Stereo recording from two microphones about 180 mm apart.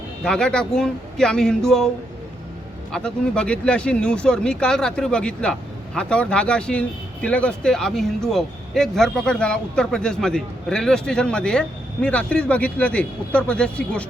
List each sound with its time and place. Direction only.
0.2 s speech: 5° left (ahead or behind)
2.9 s speech: 5° left (ahead or behind)